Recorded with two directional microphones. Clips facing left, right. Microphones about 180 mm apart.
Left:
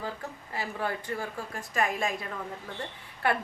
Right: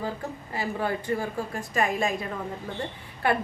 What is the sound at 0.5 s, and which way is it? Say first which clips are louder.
A woman's voice: right 4 dB; centre (ahead or behind).